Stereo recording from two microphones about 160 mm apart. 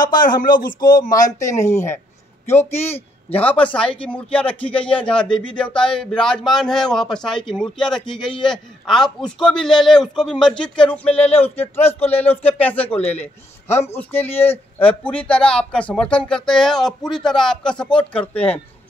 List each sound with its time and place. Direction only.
0.4 s speech: 60° left (ahead or behind)
0.7 s a man's voice: 25° left (ahead or behind); by 18.6 s 10° left (ahead or behind)